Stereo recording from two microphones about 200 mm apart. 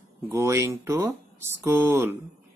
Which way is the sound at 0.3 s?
15° right (ahead or behind).